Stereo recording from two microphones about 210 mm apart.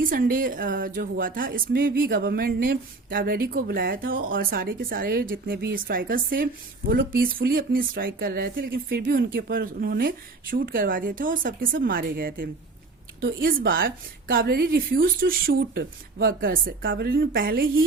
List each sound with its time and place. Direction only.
0.0 s a woman's voice: 40° right (ahead or behind)
13.7 s a woman's voice: 45° right (ahead or behind)
16.8 s a woman's voice: 55° right (ahead or behind)